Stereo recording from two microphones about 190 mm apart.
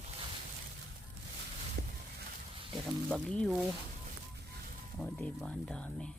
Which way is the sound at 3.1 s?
5° left (ahead or behind).